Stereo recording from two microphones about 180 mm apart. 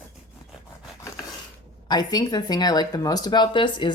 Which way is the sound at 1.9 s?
20° left (ahead or behind).